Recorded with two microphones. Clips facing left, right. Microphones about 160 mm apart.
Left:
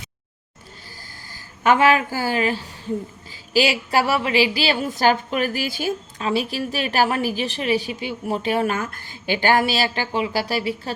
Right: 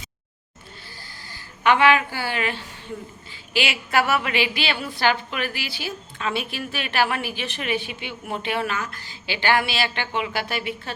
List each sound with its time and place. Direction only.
1.3 s a woman's voice: 40° left (ahead or behind)
6.2 s a woman's voice: 35° left (ahead or behind)